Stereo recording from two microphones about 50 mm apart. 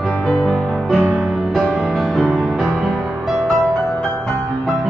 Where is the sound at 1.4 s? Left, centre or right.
Centre.